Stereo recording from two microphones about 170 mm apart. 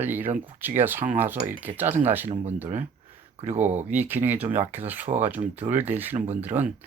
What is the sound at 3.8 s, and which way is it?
Speech, 10° right (ahead or behind).